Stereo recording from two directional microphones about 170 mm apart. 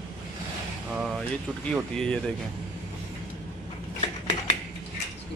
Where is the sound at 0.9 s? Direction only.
Centre (ahead or behind).